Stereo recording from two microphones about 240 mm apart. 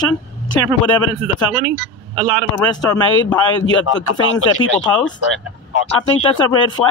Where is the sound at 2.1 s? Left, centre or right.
Right.